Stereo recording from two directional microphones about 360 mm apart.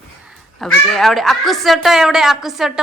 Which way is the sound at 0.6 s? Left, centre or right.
Centre.